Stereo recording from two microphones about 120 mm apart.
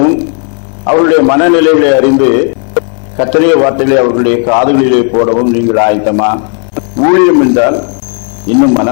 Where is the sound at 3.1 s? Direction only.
20° left (ahead or behind).